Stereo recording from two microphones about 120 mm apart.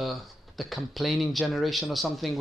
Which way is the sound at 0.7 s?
Centre (ahead or behind).